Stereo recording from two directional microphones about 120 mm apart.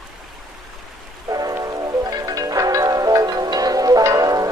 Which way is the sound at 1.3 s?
30° right (ahead or behind).